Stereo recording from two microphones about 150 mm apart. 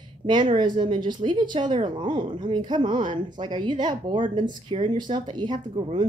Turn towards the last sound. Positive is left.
turn(degrees=-35)  # may be behind; listen again after turning